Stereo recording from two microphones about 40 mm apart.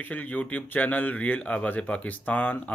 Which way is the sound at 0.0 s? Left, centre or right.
Left.